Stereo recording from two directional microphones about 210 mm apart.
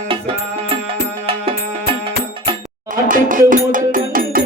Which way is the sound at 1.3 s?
25° right (ahead or behind).